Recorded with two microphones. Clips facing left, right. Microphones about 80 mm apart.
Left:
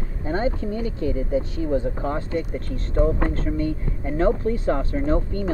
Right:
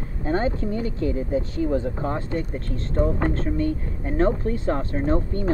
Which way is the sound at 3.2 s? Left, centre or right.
Right.